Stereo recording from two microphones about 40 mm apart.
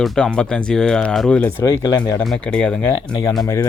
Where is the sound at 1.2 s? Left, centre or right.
Left.